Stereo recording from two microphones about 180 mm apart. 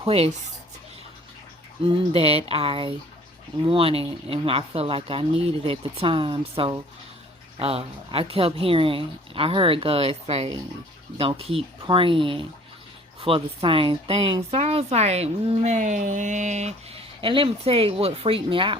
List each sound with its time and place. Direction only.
0.0 s speech: 35° right (ahead or behind)
1.8 s speech: 30° right (ahead or behind)